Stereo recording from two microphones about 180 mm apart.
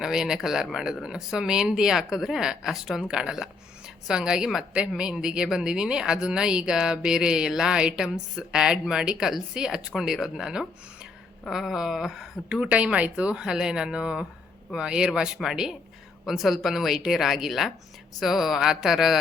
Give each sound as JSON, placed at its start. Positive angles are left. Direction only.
{"t": 0.0, "sound": "a woman's voice", "side_deg": -5}